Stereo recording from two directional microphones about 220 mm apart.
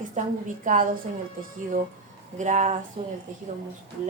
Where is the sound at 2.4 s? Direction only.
30° right (ahead or behind).